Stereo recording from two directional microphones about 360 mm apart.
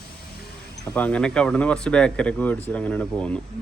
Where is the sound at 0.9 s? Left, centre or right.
Centre.